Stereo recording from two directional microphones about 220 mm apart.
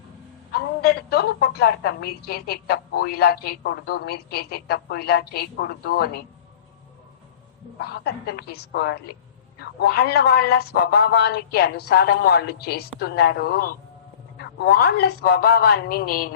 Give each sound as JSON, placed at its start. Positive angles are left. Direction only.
{"t": 0.5, "sound": "a woman's voice", "side_deg": 45}
{"t": 7.8, "sound": "a woman's voice", "side_deg": 50}